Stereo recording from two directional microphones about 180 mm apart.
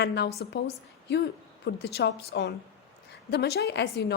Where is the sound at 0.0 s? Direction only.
70° left (ahead or behind).